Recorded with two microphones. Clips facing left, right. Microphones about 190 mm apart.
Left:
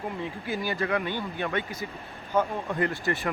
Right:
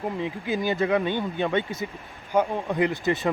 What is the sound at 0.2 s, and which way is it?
Speech, 20° right (ahead or behind).